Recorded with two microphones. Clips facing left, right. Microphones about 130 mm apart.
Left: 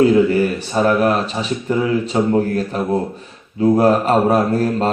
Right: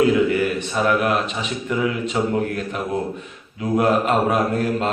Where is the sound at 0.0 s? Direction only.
35° left (ahead or behind).